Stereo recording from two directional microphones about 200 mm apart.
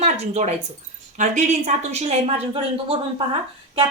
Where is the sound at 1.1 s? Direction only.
35° right (ahead or behind).